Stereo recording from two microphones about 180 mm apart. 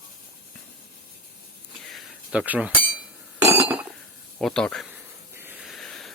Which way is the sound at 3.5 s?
10° right (ahead or behind).